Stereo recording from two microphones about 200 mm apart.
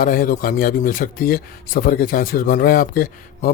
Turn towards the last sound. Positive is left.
turn(degrees=45)  # may be behind; listen again after turning